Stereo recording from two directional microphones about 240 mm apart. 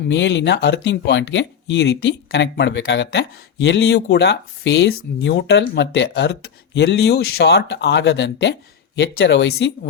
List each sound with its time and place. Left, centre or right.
0.1 s speech: left